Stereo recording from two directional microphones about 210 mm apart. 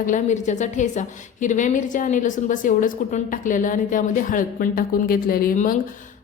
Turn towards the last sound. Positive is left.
turn(degrees=40)  # may be behind; listen again after turning